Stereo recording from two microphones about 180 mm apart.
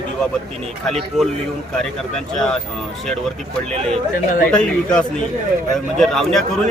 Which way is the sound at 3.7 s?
35° right (ahead or behind).